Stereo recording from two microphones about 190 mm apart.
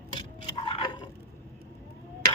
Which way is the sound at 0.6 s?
25° left (ahead or behind).